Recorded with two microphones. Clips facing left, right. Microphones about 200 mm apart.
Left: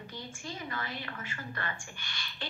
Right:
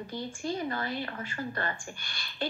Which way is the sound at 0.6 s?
35° right (ahead or behind).